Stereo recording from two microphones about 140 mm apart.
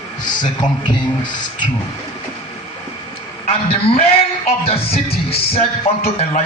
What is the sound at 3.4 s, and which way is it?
A man's voice, 45° left (ahead or behind).